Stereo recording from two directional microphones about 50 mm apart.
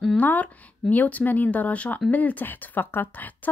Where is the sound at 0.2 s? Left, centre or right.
Left.